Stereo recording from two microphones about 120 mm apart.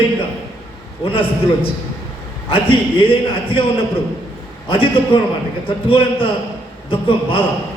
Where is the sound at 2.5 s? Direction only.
50° left (ahead or behind).